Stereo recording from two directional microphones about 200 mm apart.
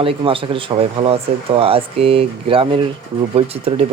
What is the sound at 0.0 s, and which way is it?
Speech, 25° right (ahead or behind).